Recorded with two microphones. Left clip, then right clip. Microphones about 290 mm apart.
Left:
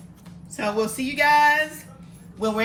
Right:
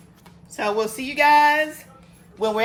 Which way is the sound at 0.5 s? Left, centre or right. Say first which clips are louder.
Right 2 dB; right.